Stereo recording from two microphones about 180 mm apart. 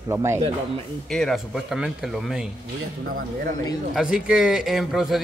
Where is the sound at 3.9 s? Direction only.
5° right (ahead or behind).